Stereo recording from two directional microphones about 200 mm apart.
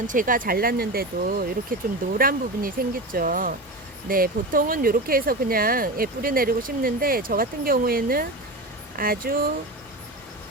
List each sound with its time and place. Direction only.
0.1 s speech: 40° right (ahead or behind)